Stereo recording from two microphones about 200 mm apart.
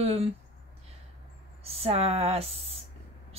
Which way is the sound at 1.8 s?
30° right (ahead or behind).